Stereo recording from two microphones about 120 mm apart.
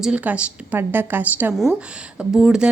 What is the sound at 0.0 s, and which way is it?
A woman's voice, 10° right (ahead or behind).